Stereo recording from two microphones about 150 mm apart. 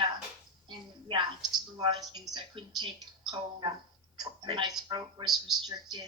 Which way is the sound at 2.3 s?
30° right (ahead or behind).